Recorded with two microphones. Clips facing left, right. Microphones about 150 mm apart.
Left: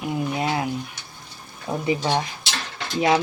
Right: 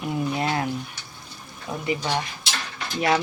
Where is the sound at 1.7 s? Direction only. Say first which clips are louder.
Left 4 dB; 25° left (ahead or behind).